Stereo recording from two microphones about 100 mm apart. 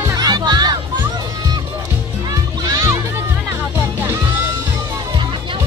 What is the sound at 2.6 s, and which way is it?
Music, 35° right (ahead or behind).